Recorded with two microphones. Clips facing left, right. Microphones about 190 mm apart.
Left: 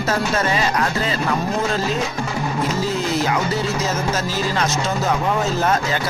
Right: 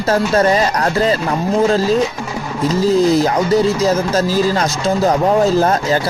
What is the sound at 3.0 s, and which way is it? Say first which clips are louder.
Speech: right 8 dB; 35° right (ahead or behind).